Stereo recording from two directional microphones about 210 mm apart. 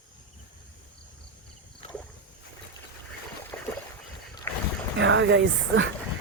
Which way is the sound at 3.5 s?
10° left (ahead or behind).